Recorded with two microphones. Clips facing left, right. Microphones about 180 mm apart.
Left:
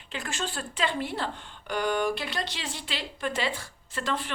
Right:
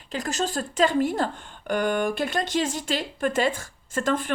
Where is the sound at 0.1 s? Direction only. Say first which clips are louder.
Right 7 dB; 40° right (ahead or behind).